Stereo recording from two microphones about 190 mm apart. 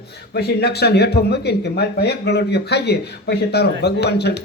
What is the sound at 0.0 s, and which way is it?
Speech, 60° left (ahead or behind).